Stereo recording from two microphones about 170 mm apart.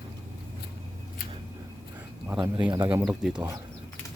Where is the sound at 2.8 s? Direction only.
10° right (ahead or behind).